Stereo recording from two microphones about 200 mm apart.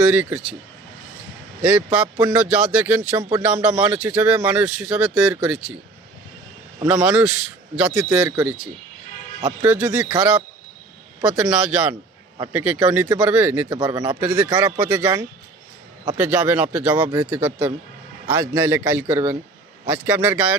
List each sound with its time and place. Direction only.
0.1 s speech: 5° right (ahead or behind)
1.6 s speech: 5° right (ahead or behind)
6.8 s speech: 5° right (ahead or behind)
9.4 s speech: 20° right (ahead or behind)
9.6 s speech: 5° right (ahead or behind)
13.7 s speech: 20° right (ahead or behind)
14.0 s speech: 5° right (ahead or behind)
16.1 s speech: 5° right (ahead or behind)